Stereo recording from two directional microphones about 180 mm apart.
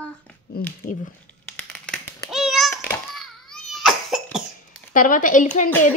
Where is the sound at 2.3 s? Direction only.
Centre (ahead or behind).